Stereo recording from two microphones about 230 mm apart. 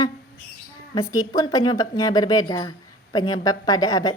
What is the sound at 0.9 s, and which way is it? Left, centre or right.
A woman's voice, centre.